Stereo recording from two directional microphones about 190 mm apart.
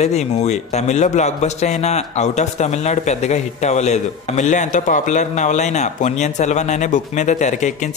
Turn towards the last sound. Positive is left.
turn(degrees=40)  # may be behind; listen again after turning